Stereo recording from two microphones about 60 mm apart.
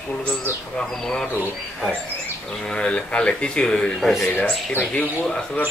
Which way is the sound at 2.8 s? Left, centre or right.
Centre.